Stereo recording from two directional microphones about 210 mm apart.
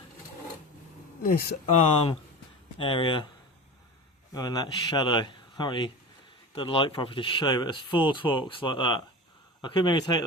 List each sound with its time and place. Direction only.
1.2 s speech: 45° left (ahead or behind)
2.7 s speech: 25° left (ahead or behind)
4.4 s speech: 20° left (ahead or behind)